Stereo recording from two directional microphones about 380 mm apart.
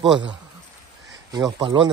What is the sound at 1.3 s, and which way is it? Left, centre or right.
Speech, centre.